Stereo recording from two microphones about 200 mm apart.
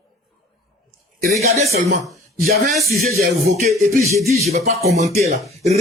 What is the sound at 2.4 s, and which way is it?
Music, 50° right (ahead or behind).